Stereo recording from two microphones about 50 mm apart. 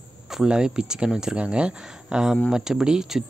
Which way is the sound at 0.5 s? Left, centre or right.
Centre.